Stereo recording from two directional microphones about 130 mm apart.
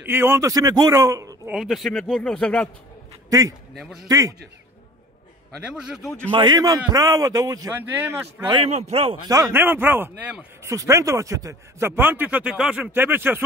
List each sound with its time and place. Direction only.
0.0 s a man's voice: 15° right (ahead or behind)
1.5 s speech: centre (ahead or behind)
3.3 s a man's voice: 30° right (ahead or behind)
3.7 s speech: centre (ahead or behind)
4.1 s a man's voice: 25° right (ahead or behind)
5.6 s speech: 5° right (ahead or behind)
6.3 s a man's voice: 35° right (ahead or behind)
7.9 s speech: 15° right (ahead or behind)
8.6 s a man's voice: 55° right (ahead or behind)
9.3 s speech: 20° right (ahead or behind)
10.7 s speech: 25° right (ahead or behind)